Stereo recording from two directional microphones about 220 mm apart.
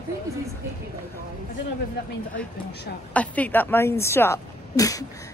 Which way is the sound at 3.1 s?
5° left (ahead or behind).